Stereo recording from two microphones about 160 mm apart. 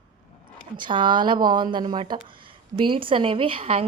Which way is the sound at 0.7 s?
30° right (ahead or behind).